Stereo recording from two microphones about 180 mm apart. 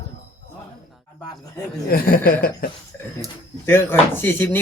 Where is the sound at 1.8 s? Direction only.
55° left (ahead or behind).